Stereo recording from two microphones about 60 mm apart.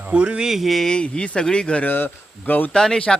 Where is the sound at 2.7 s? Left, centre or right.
Centre.